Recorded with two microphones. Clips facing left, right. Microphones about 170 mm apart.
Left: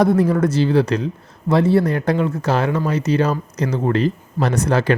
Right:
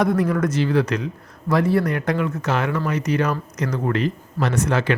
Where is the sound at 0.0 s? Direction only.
30° left (ahead or behind).